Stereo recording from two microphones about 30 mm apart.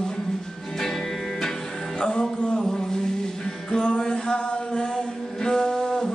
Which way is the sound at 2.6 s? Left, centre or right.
Centre.